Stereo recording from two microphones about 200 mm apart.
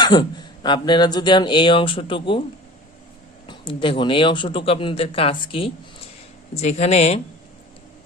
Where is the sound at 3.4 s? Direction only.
25° left (ahead or behind).